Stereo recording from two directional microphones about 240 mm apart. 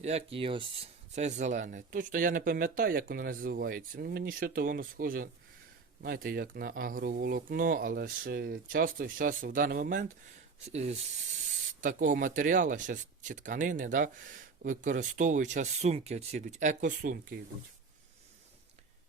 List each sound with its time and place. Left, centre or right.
0.0 s speech: right